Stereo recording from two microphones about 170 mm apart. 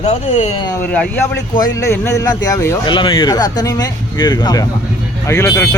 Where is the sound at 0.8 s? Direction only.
10° left (ahead or behind).